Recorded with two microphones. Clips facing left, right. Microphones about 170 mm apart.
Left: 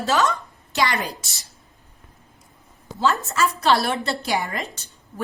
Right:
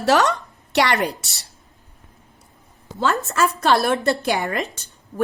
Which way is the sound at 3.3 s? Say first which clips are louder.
Right 4 dB; 55° right (ahead or behind).